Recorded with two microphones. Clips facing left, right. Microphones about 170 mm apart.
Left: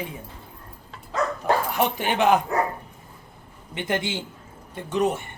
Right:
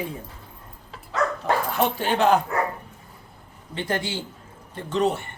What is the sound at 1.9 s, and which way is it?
Speech, 15° left (ahead or behind).